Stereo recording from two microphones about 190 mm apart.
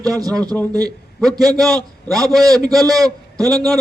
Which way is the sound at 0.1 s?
20° right (ahead or behind).